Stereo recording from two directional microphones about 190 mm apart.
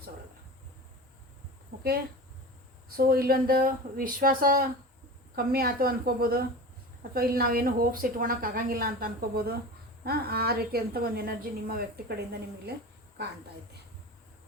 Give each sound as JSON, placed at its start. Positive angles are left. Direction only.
{"t": 2.9, "sound": "a woman's voice", "side_deg": -50}